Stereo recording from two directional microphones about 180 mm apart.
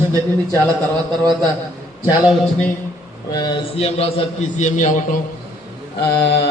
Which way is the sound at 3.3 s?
25° left (ahead or behind).